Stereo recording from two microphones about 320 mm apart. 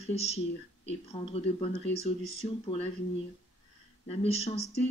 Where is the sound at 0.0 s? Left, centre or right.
Centre.